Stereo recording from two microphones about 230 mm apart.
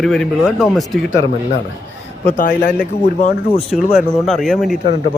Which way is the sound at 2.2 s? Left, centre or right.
Left.